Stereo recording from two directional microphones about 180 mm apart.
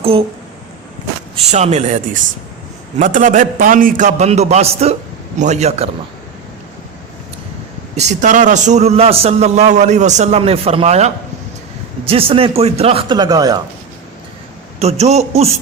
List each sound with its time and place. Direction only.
1.5 s a man's voice: 40° right (ahead or behind)
7.9 s a man's voice: 40° right (ahead or behind)
13.1 s speech: 20° right (ahead or behind)
14.8 s a man's voice: 35° right (ahead or behind)